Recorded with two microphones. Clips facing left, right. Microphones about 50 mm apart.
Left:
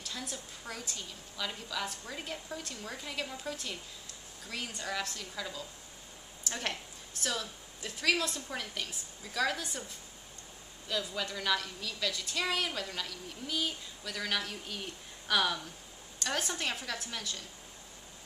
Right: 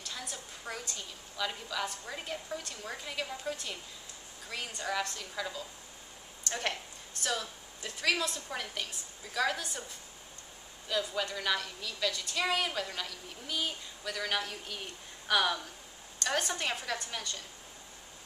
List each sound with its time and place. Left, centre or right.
0.1 s a woman's voice: centre
10.9 s a woman's voice: centre